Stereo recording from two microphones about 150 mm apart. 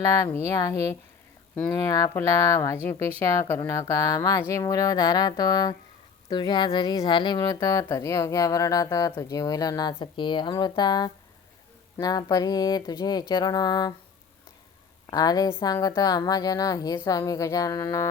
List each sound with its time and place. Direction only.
0.0 s speech: 20° left (ahead or behind)
15.0 s speech: 25° left (ahead or behind)